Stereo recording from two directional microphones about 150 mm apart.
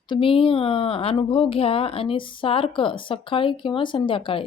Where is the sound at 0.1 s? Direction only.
35° left (ahead or behind).